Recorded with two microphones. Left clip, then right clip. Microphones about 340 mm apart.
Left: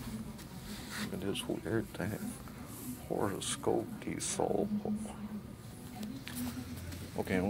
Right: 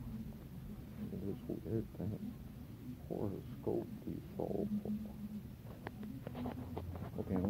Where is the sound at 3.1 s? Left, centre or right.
Left.